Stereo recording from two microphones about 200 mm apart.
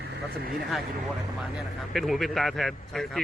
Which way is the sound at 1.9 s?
Centre (ahead or behind).